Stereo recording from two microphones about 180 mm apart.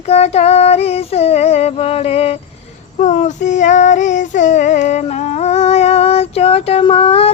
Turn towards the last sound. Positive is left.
turn(degrees=35)  # may be behind; listen again after turning